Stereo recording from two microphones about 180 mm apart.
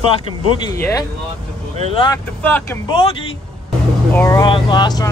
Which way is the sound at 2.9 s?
30° left (ahead or behind).